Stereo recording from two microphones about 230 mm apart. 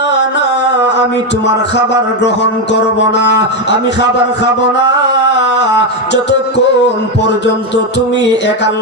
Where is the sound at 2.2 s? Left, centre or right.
Left.